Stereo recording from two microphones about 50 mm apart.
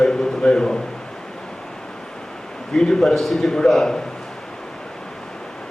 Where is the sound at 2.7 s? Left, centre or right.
Centre.